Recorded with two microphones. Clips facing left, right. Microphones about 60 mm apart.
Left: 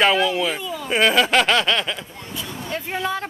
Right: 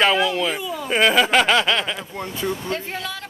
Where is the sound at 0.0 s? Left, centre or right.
Centre.